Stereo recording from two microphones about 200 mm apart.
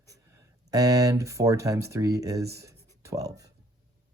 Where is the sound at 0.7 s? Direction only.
15° right (ahead or behind).